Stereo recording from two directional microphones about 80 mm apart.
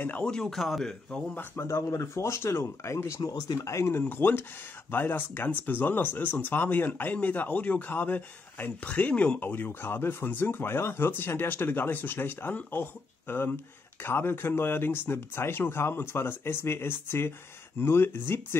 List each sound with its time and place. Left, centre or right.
0.0 s speech: left
0.3 s a man's voice: centre
1.3 s speech: left
1.7 s speech: left
3.2 s speech: left
3.5 s speech: left
4.0 s speech: left